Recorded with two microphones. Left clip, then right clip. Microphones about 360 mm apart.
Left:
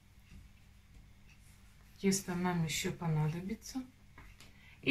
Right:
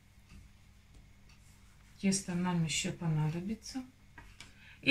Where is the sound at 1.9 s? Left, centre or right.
Centre.